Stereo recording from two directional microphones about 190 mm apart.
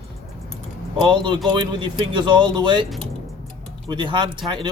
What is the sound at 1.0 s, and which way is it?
Speech, 25° right (ahead or behind).